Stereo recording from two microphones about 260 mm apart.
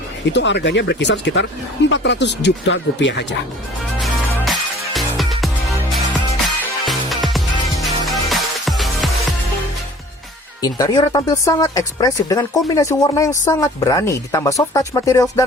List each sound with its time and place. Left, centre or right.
0.3 s speech: left
4.0 s music: centre
6.8 s music: centre
10.6 s a woman's voice: centre